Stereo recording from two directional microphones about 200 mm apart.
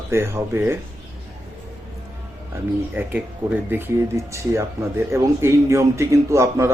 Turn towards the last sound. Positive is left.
turn(degrees=-15)  # may be behind; listen again after turning